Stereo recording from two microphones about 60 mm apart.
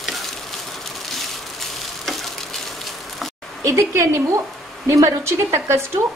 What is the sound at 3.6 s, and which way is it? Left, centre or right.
A woman's voice, right.